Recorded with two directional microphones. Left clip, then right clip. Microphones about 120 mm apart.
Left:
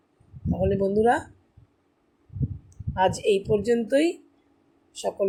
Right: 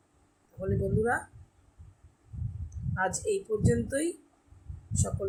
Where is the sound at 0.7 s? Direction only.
50° left (ahead or behind).